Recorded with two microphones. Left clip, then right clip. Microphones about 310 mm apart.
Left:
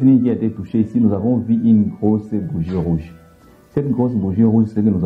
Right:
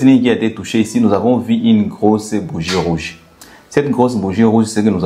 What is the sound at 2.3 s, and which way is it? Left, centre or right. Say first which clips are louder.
Speech: right 6 dB; centre.